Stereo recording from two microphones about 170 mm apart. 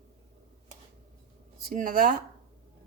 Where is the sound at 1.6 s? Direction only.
55° right (ahead or behind).